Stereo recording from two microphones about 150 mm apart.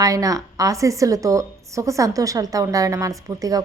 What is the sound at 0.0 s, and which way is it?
A woman's voice, 25° right (ahead or behind).